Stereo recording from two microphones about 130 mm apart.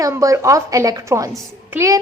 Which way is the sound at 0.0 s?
25° right (ahead or behind).